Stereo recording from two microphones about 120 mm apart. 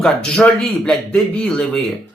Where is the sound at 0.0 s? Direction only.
5° left (ahead or behind).